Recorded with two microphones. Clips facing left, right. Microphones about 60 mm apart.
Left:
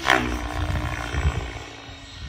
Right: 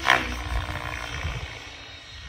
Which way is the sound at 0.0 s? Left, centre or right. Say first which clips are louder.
Left 2 dB; centre.